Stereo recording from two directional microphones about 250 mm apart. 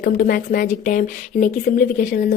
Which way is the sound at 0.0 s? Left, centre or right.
Left.